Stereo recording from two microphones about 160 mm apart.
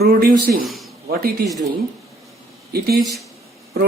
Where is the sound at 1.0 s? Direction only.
75° right (ahead or behind).